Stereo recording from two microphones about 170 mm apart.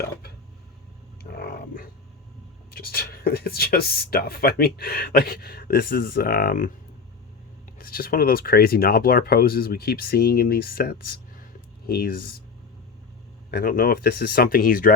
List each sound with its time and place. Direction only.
1.2 s a sound: 65° left (ahead or behind)
2.6 s speech: 60° left (ahead or behind)
7.8 s speech: 60° left (ahead or behind)
13.5 s speech: 60° left (ahead or behind)